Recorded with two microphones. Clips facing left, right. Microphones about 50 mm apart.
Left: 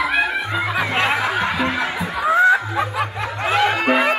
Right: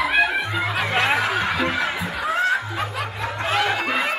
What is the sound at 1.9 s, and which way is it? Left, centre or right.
Snicker, centre.